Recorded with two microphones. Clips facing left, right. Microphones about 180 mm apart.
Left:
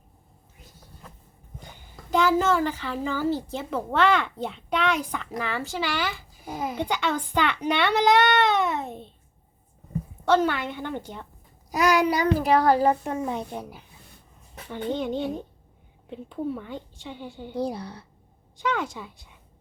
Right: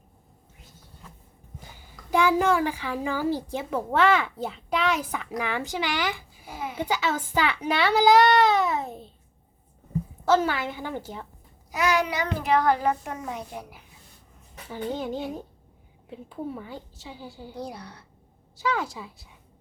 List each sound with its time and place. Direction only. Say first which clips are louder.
2.0 s a woman's voice: even; 10° right (ahead or behind)
5.4 s a woman's voice: even; 15° right (ahead or behind)
6.4 s a child's voice: left 5 dB; 40° left (ahead or behind)
6.7 s a child's voice: right 1 dB; 5° right (ahead or behind)
10.2 s a child's voice: left 1 dB; 5° right (ahead or behind)
11.7 s a child's voice: left 4 dB; 35° left (ahead or behind)
14.7 s a child's voice: left 2 dB; 5° right (ahead or behind)
17.5 s a child's voice: left 9 dB; 30° left (ahead or behind)
18.5 s a child's voice: even; 5° right (ahead or behind)